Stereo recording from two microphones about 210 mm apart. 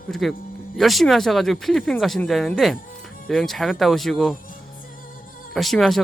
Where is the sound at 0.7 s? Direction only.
Centre (ahead or behind).